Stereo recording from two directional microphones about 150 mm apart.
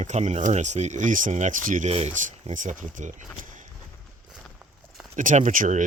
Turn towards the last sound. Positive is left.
turn(degrees=-60)  # may be behind; listen again after turning